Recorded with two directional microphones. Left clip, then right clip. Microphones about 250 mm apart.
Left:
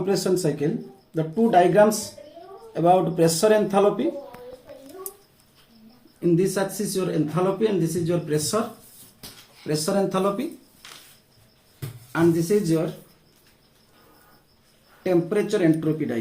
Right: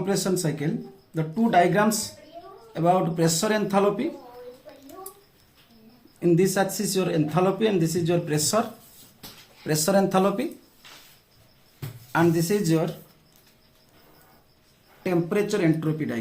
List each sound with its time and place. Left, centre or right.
0.0 s speech: right
6.1 s speech: right
9.6 s speech: right
12.1 s speech: right
15.0 s speech: right